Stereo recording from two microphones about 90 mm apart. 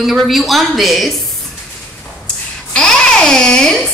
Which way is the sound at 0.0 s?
Centre (ahead or behind).